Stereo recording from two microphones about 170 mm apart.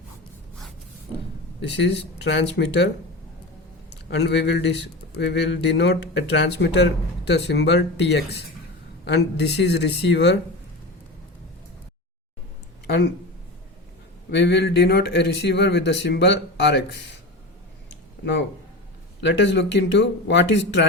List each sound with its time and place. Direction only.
1.6 s speech: 90° left
14.3 s speech: 85° left
17.8 s a sound: 90° left
19.2 s speech: 90° left